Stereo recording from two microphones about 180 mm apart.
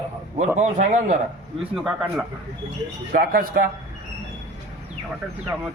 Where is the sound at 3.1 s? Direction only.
50° right (ahead or behind).